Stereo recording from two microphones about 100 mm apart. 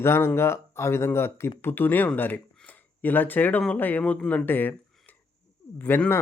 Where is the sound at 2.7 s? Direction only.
20° left (ahead or behind).